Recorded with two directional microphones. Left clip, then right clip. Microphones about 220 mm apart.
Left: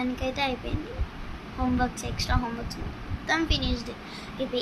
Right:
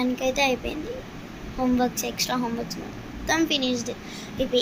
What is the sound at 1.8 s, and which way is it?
A woman's voice, 5° left (ahead or behind).